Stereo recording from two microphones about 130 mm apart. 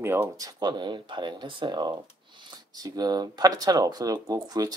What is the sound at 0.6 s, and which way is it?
Speech, 35° right (ahead or behind).